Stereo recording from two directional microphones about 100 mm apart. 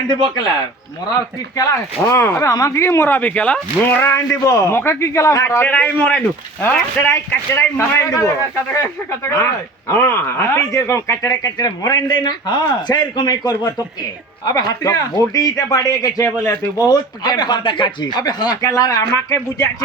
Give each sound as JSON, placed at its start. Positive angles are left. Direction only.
{"t": 1.1, "sound": "a man's voice", "side_deg": 35}
{"t": 4.0, "sound": "a man's voice", "side_deg": 30}
{"t": 7.3, "sound": "a man's voice", "side_deg": 25}